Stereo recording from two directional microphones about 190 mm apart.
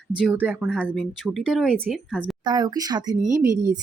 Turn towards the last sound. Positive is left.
turn(degrees=-15)  # may be behind; listen again after turning